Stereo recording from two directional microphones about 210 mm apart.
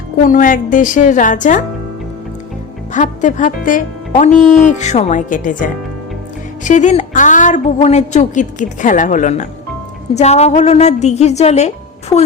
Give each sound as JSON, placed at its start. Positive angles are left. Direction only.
{"t": 0.2, "sound": "a woman's voice", "side_deg": 40}
{"t": 2.9, "sound": "a woman's voice", "side_deg": 35}